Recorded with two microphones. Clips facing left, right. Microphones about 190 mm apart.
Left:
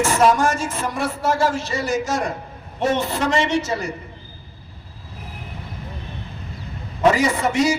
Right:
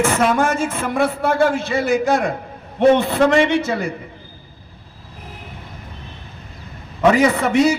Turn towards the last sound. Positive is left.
turn(degrees=-60)  # may be behind; listen again after turning